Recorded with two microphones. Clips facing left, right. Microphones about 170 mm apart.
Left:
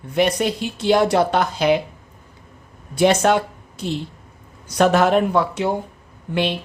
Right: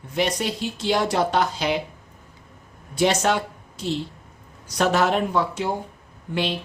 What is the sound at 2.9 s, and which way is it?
Speech, 55° left (ahead or behind).